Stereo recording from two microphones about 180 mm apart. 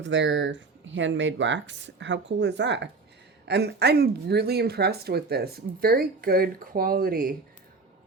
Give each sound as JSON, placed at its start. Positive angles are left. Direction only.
{"t": 0.0, "sound": "speech", "side_deg": -85}
{"t": 3.4, "sound": "speech", "side_deg": -65}